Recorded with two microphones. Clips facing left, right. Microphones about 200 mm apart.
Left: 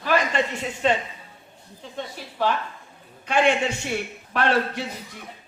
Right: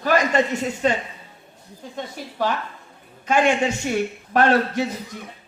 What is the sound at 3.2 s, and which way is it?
A man's voice, 45° right (ahead or behind).